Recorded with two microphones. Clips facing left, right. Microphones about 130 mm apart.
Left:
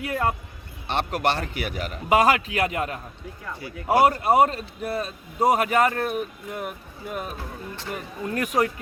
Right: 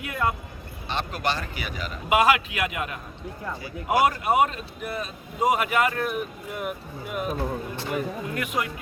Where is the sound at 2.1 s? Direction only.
40° left (ahead or behind).